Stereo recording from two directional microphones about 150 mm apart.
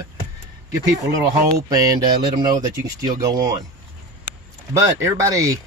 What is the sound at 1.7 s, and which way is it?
Speech, 25° right (ahead or behind).